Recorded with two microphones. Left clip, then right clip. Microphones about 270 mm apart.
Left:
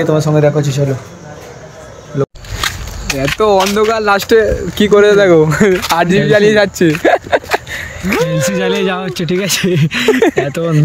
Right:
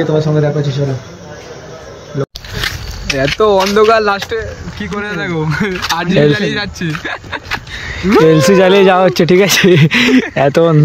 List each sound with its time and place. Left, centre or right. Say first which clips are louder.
0.0 s speech: left 2 dB; centre
2.6 s a sound: left 1 dB; centre
3.3 s speech: left 1 dB; centre
4.7 s speech: left 13 dB; left
5.8 s speech: left 4 dB; centre
6.0 s speech: left 1 dB; centre
8.0 s speech: right 7 dB; centre